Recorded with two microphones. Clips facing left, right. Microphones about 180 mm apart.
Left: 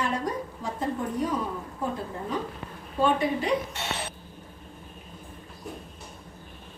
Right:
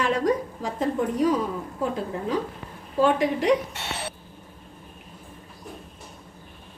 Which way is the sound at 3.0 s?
90° right.